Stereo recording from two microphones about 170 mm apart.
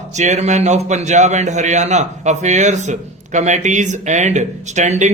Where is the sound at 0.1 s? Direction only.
45° right (ahead or behind).